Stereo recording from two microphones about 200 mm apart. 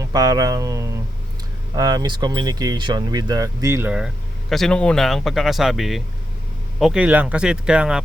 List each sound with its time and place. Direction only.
0.0 s speech: 15° right (ahead or behind)